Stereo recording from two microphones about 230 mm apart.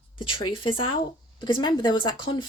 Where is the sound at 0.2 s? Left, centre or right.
Left.